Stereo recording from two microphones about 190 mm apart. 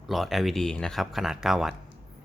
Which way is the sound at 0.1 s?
Centre (ahead or behind).